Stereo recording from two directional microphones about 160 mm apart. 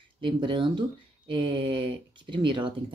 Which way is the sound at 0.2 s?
30° right (ahead or behind).